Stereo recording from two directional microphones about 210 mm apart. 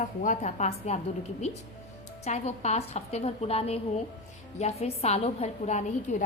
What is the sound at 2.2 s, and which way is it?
A woman's voice, 30° left (ahead or behind).